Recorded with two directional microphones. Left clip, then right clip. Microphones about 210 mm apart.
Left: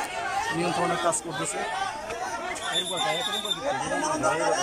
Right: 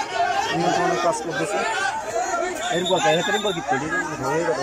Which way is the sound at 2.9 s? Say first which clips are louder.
Right 8 dB; 45° right (ahead or behind).